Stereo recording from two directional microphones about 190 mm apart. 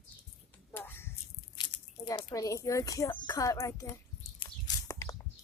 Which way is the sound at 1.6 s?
25° left (ahead or behind).